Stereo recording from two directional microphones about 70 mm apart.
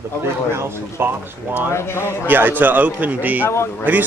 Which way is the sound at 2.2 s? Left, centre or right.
Right.